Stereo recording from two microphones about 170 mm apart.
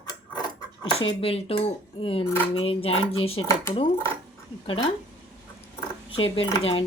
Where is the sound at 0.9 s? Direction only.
35° left (ahead or behind).